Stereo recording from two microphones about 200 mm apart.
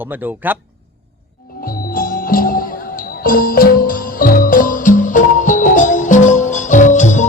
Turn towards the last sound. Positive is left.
turn(degrees=35)  # may be behind; listen again after turning